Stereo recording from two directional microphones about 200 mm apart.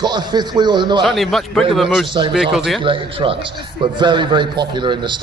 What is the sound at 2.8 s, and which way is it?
A man's voice, 25° right (ahead or behind).